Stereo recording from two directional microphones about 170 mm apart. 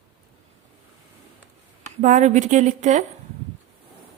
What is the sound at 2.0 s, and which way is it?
Speech, 45° right (ahead or behind).